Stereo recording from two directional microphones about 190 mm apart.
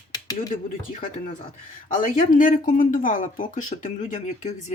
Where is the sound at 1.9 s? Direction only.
40° left (ahead or behind).